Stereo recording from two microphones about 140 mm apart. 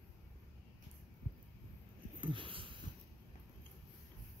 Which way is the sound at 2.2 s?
35° right (ahead or behind).